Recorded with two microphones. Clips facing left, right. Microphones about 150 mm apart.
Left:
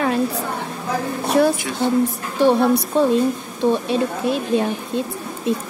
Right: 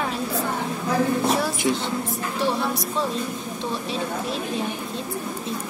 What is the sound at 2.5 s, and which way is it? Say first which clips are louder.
A woman's voice: left 9 dB; 55° left (ahead or behind).